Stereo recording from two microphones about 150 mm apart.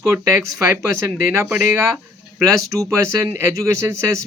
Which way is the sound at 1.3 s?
15° right (ahead or behind).